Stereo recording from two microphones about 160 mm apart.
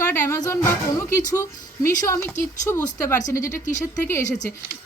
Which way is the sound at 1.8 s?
20° left (ahead or behind).